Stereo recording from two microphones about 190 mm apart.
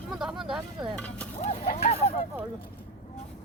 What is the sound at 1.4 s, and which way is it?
Clip-clop, 40° left (ahead or behind).